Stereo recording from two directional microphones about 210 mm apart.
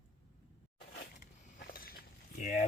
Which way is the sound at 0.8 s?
45° left (ahead or behind).